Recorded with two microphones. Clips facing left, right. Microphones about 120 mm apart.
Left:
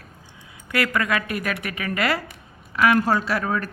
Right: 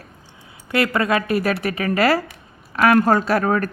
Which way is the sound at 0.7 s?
25° right (ahead or behind).